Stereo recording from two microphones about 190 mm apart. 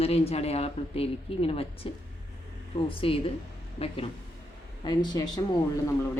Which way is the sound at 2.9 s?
30° left (ahead or behind).